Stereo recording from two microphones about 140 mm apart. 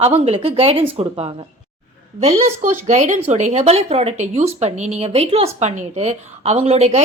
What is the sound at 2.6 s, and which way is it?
A woman's voice, 60° right (ahead or behind).